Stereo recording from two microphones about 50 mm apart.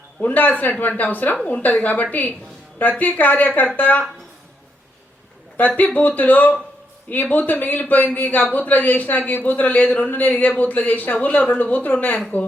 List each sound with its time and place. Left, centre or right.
0.2 s a man's voice: left
5.5 s a man's voice: left